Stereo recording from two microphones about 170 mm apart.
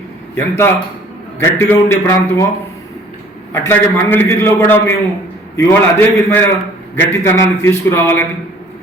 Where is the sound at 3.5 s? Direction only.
15° left (ahead or behind).